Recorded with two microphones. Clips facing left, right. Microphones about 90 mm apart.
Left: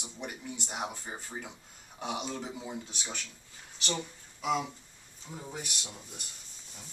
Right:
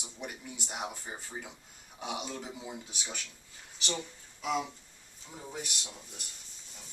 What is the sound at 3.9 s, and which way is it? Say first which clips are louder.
Speech: left 2 dB; 5° left (ahead or behind).